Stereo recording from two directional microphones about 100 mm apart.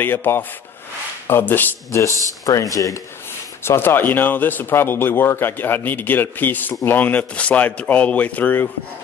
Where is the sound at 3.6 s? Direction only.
25° left (ahead or behind).